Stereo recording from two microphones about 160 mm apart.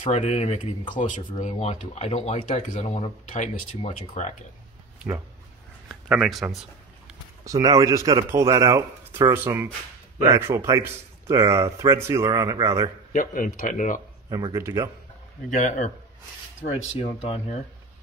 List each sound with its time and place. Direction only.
0.0 s speech: 45° left (ahead or behind)
4.9 s a sound: 10° right (ahead or behind)
5.9 s speech: 5° right (ahead or behind)
7.4 s speech: 20° right (ahead or behind)
13.1 s speech: 55° left (ahead or behind)
14.3 s speech: 20° right (ahead or behind)
15.5 s speech: 50° left (ahead or behind)
16.6 s speech: 40° left (ahead or behind)